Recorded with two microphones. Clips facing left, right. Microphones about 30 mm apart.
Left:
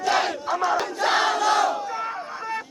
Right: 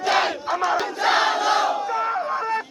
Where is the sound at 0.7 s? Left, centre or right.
Centre.